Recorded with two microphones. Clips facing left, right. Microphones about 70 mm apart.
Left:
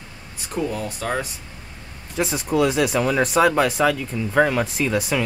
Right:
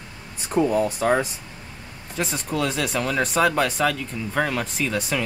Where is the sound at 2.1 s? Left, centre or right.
Centre.